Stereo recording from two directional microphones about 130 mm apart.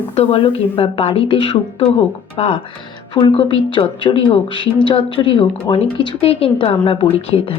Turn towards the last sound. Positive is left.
turn(degrees=50)  # may be behind; listen again after turning